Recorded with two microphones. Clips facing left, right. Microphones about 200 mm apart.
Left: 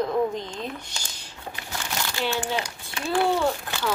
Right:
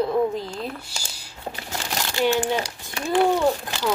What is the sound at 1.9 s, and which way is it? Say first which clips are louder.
Crumpling: right 6 dB; 40° right (ahead or behind).